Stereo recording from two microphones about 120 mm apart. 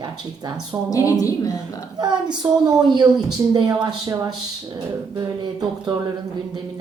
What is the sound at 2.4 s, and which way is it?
A woman's voice, 35° right (ahead or behind).